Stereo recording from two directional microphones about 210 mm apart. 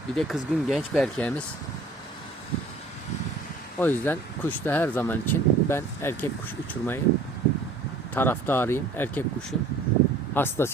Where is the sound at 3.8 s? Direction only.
10° left (ahead or behind).